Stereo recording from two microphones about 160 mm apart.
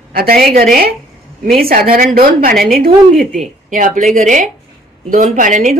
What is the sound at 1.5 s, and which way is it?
A woman's voice, 65° right (ahead or behind).